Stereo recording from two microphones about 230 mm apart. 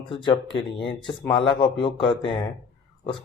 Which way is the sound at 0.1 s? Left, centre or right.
Left.